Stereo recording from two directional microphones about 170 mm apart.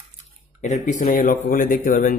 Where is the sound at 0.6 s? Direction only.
45° left (ahead or behind).